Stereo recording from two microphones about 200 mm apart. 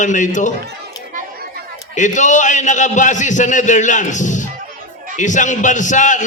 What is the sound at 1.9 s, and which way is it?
A man's voice, 40° left (ahead or behind).